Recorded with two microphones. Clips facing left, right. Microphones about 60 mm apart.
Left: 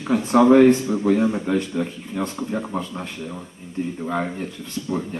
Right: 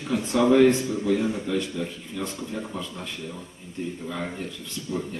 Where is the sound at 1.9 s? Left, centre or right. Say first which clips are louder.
Left 4 dB; left.